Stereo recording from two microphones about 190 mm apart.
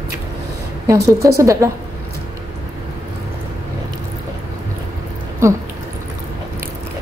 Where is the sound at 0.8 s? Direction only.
15° right (ahead or behind).